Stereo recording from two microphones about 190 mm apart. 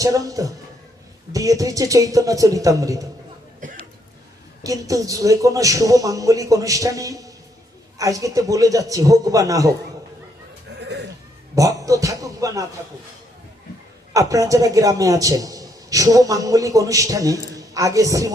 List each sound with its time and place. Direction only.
0.0 s a man's voice: 20° right (ahead or behind)
3.6 s a sound: 40° right (ahead or behind)
4.6 s a man's voice: 15° right (ahead or behind)
10.8 s goat: 65° right (ahead or behind)
11.5 s a man's voice: 15° right (ahead or behind)
14.1 s a man's voice: 15° right (ahead or behind)